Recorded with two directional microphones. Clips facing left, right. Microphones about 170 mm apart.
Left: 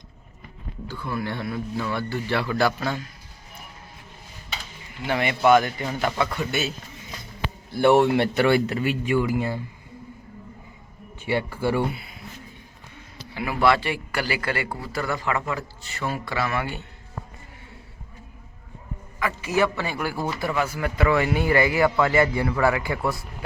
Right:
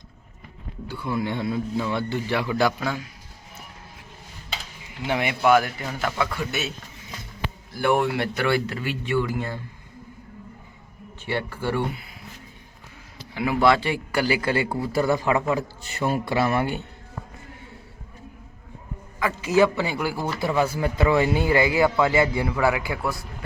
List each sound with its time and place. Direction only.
0.9 s a man's voice: 15° right (ahead or behind)
5.0 s a man's voice: 10° right (ahead or behind)
7.7 s speech: 25° left (ahead or behind); by 9.6 s 10° left (ahead or behind)
11.3 s speech: 10° left (ahead or behind)
13.3 s a man's voice: 15° right (ahead or behind)
19.2 s a man's voice: 20° right (ahead or behind); by 23.2 s centre (ahead or behind)